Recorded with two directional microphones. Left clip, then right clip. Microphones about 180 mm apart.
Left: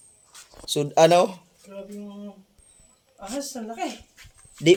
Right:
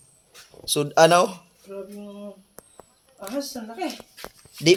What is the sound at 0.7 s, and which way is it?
Speech, 15° left (ahead or behind).